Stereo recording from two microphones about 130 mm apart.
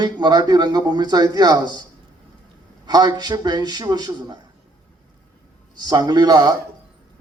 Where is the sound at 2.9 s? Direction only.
30° right (ahead or behind).